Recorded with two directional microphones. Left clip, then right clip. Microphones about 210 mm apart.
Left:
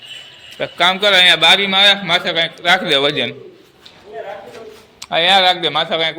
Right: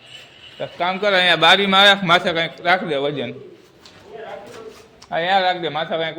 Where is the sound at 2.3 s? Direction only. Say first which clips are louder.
Left 4 dB; 15° right (ahead or behind).